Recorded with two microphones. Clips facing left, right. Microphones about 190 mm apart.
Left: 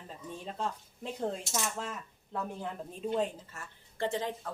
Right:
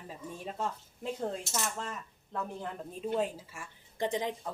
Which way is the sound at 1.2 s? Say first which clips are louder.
Left 3 dB; 5° left (ahead or behind).